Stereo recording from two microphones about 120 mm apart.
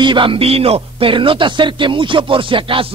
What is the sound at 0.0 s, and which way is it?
Speech, 45° right (ahead or behind).